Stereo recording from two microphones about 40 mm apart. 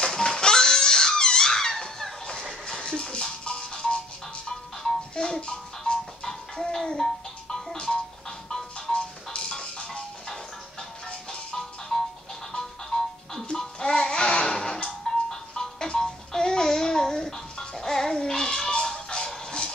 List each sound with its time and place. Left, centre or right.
0.0 s crying: centre
2.6 s music: left
5.1 s music: centre